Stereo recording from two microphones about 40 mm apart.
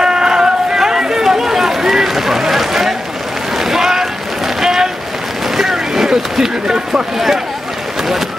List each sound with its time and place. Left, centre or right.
0.0 s run: centre
3.5 s boat: centre
5.6 s a sound: centre